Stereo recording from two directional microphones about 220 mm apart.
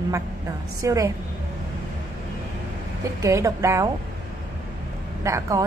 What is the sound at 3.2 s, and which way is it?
Speech, 15° right (ahead or behind).